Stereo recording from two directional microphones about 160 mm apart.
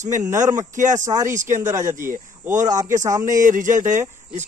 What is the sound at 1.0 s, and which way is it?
Speech, 20° right (ahead or behind).